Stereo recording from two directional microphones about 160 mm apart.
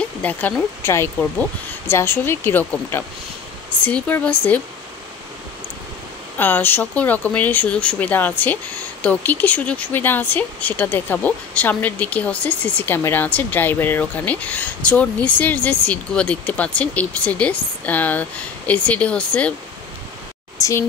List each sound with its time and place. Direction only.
0.0 s speech: 10° left (ahead or behind)
6.3 s speech: 10° left (ahead or behind)
20.5 s a woman's voice: 20° left (ahead or behind)